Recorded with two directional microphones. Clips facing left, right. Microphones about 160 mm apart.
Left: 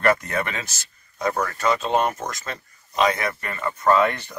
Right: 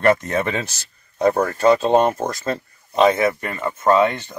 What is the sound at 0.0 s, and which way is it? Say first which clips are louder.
Speech: right 4 dB; 25° right (ahead or behind).